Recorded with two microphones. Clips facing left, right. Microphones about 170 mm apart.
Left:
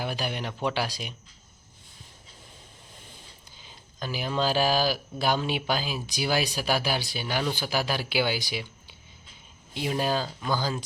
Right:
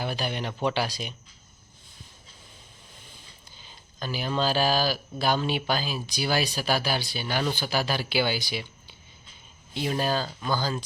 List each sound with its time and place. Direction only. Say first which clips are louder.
0.0 s speech: right 1 dB; 10° left (ahead or behind)
3.6 s speech: even; 10° left (ahead or behind)